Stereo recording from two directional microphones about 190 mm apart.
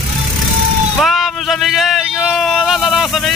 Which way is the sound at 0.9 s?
Centre (ahead or behind).